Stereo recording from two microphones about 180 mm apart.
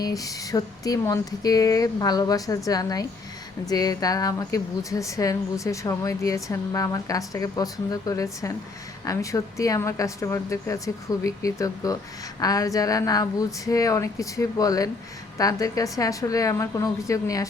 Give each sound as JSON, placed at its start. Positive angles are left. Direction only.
{"t": 0.0, "sound": "speech", "side_deg": 20}